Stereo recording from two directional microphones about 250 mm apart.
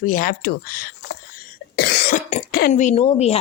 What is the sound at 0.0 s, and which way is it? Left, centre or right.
Speech, left.